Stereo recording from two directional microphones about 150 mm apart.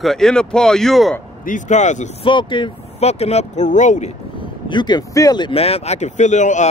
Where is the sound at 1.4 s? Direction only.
55° left (ahead or behind).